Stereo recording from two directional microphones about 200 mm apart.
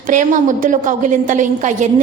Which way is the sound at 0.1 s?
40° right (ahead or behind).